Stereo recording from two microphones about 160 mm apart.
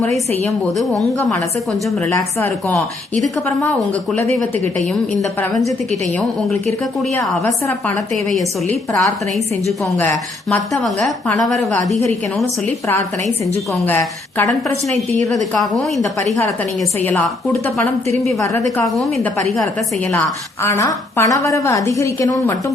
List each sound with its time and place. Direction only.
0.4 s a woman's voice: 5° left (ahead or behind)
2.4 s a woman's voice: 10° left (ahead or behind)
5.9 s a woman's voice: centre (ahead or behind)
10.0 s a woman's voice: 15° left (ahead or behind)
10.8 s a woman's voice: centre (ahead or behind)
14.3 s a woman's voice: 20° left (ahead or behind)
17.0 s a woman's voice: 10° left (ahead or behind)
18.9 s a woman's voice: centre (ahead or behind)
20.1 s a woman's voice: 15° left (ahead or behind)